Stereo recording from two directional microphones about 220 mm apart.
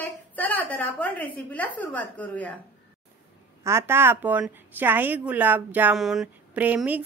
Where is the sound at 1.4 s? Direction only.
5° left (ahead or behind).